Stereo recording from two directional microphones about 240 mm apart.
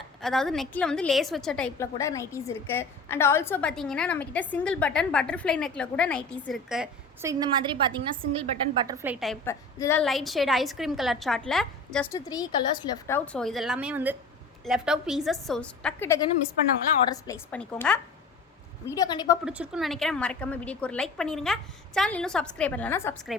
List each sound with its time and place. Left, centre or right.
0.2 s a woman's voice: centre
9.2 s a woman's voice: centre
10.0 s a woman's voice: centre
12.3 s a woman's voice: centre
18.9 s a woman's voice: centre
19.5 s a woman's voice: centre
23.3 s a woman's voice: centre